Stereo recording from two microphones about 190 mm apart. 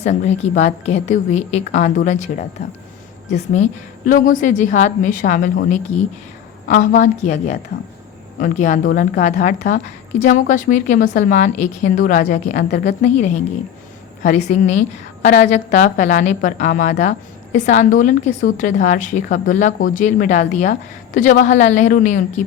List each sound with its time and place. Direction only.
0.0 s a woman's voice: 35° left (ahead or behind)
6.7 s a woman's voice: 40° left (ahead or behind)